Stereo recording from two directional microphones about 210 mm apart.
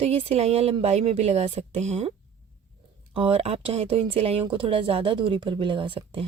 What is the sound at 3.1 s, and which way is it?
Speech, 30° right (ahead or behind).